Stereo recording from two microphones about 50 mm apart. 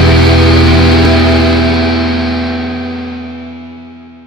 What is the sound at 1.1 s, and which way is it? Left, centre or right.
Music, centre.